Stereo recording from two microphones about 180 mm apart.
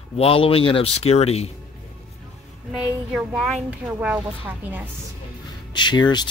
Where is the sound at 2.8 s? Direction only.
5° right (ahead or behind).